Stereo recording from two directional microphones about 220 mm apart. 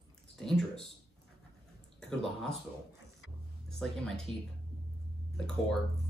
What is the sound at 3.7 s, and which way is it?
Speech, centre (ahead or behind).